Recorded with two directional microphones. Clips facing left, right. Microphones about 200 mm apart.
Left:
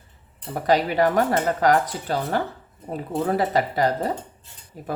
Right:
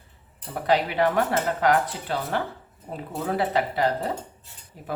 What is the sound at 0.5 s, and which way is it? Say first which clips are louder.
Speech: left 3 dB; 40° left (ahead or behind).